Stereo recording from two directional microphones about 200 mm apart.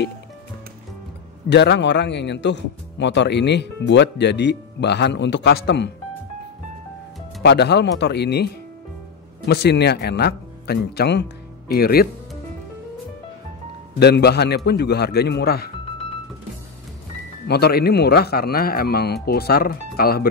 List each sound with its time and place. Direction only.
1.5 s a man's voice: 60° left (ahead or behind)
7.4 s a man's voice: 55° left (ahead or behind)
9.5 s speech: 55° left (ahead or behind)
13.9 s a man's voice: 55° left (ahead or behind)
17.5 s speech: 55° left (ahead or behind)